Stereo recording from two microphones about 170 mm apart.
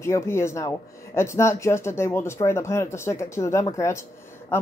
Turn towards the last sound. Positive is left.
turn(degrees=15)  # may be behind; listen again after turning